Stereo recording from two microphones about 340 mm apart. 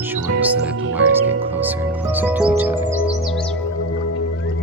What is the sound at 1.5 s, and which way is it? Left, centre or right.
Music, centre.